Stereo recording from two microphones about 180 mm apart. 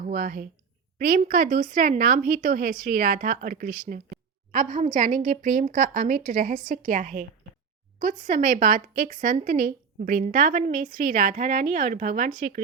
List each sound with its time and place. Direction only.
0.0 s speech: 50° right (ahead or behind)